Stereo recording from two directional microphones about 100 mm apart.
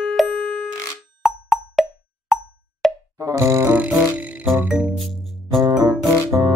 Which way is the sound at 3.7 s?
15° right (ahead or behind).